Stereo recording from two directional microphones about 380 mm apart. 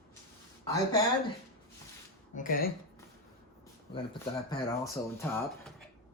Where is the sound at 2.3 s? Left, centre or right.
Left.